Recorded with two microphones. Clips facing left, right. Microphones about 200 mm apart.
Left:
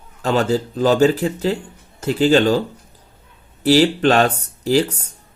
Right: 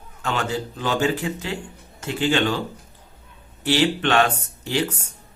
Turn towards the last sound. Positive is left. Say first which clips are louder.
# left 7 dB
turn(degrees=40)  # may be behind; listen again after turning